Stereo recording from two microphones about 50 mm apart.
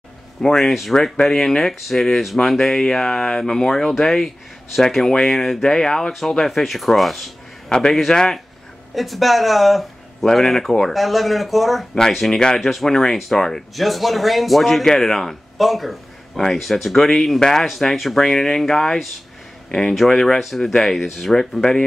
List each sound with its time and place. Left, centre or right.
0.4 s speech: centre
7.7 s speech: centre
8.9 s speech: centre
12.3 s speech: centre
12.5 s speech: centre
20.3 s speech: centre
20.6 s speech: centre